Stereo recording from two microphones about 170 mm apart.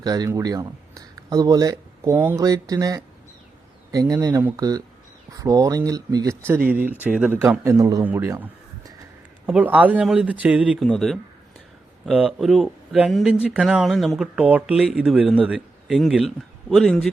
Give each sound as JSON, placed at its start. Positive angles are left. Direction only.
{"t": 0.0, "sound": "speech", "side_deg": -20}
{"t": 9.5, "sound": "speech", "side_deg": -5}